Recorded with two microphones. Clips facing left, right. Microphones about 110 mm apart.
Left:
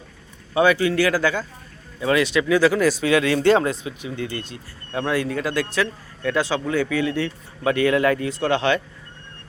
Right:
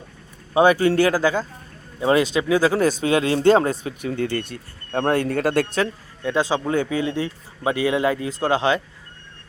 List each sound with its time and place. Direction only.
0.6 s speech: 40° right (ahead or behind)
4.2 s speech: 55° right (ahead or behind)
6.2 s speech: 20° right (ahead or behind)